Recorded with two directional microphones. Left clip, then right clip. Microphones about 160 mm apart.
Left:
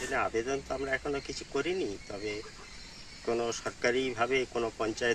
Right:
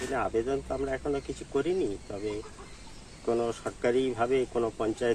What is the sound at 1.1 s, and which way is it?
Speech, 10° left (ahead or behind).